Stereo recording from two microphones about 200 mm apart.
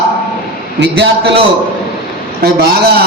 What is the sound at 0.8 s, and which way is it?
Speech, 55° right (ahead or behind).